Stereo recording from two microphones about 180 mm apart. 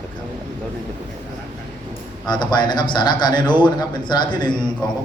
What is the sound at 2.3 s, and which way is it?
A man's voice, 25° left (ahead or behind).